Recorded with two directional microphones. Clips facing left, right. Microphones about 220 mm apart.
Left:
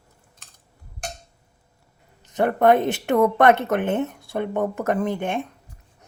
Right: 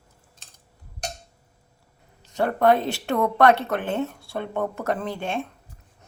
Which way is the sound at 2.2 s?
20° left (ahead or behind).